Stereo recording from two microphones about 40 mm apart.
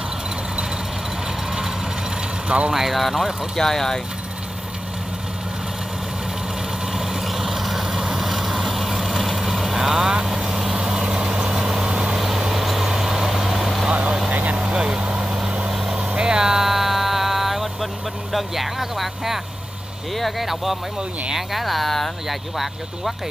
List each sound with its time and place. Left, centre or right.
2.4 s speech: right
2.7 s speech: centre
3.5 s speech: centre
6.9 s vehicle: centre
12.2 s vehicle: centre
13.8 s vehicle: right
14.6 s vehicle: centre
15.7 s vehicle: centre
16.0 s vehicle: right; by 17.8 s centre
18.3 s speech: centre